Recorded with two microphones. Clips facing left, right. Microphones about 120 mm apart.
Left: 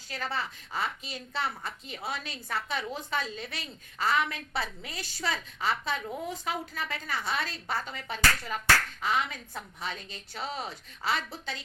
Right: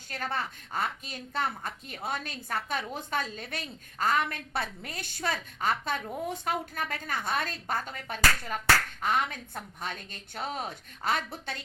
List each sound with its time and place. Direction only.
0.1 s a woman's voice: 50° right (ahead or behind)